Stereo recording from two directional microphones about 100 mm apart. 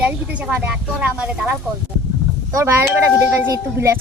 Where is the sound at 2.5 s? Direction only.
30° right (ahead or behind).